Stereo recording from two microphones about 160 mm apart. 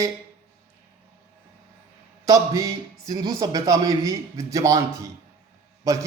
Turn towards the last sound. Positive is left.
turn(degrees=-20)  # may be behind; listen again after turning